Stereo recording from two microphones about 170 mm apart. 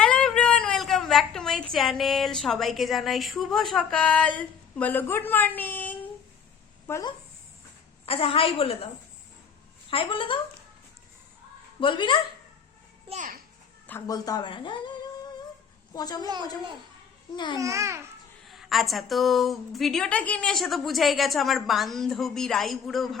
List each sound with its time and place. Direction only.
0.0 s a woman's voice: 5° left (ahead or behind)
8.0 s a woman's voice: 35° left (ahead or behind)
9.9 s a woman's voice: 30° left (ahead or behind)
11.8 s speech: 30° left (ahead or behind)
13.1 s a child's voice: 50° right (ahead or behind)
14.1 s speech: 20° left (ahead or behind)
17.3 s speech: 25° left (ahead or behind)
17.6 s a child's voice: 20° right (ahead or behind)
18.4 s a woman's voice: centre (ahead or behind)